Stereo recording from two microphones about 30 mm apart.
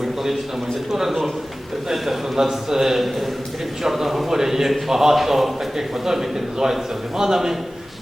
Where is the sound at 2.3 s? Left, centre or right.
Centre.